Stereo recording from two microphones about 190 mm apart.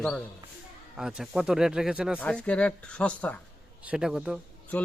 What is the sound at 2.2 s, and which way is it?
Speech, 5° left (ahead or behind).